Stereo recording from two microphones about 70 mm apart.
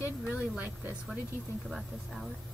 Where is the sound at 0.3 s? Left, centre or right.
Centre.